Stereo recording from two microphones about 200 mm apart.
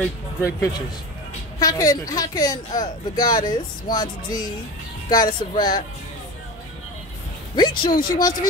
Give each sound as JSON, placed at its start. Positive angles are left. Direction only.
{"t": 0.0, "sound": "a woman's voice", "side_deg": 15}
{"t": 7.5, "sound": "a woman's voice", "side_deg": 25}